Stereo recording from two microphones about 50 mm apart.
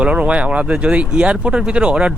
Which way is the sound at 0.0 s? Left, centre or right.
Right.